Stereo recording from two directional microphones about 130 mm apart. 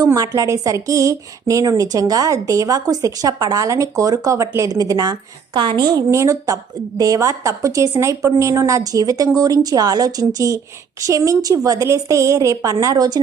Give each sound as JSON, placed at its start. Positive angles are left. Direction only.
{"t": 0.0, "sound": "a woman's voice", "side_deg": -25}
{"t": 6.1, "sound": "a woman's voice", "side_deg": -25}